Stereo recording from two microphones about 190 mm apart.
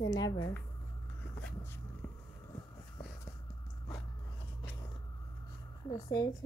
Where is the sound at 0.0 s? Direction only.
20° left (ahead or behind).